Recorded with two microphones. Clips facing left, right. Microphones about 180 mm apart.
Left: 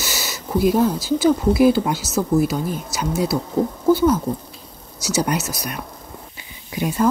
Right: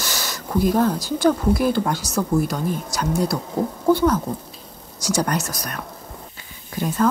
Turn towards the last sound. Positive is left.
turn(degrees=10)  # may be behind; listen again after turning